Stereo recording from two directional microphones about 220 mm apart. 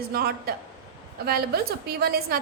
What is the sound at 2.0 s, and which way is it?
Speech, 45° right (ahead or behind).